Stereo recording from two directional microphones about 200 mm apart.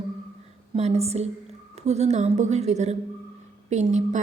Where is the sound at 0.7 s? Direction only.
30° right (ahead or behind).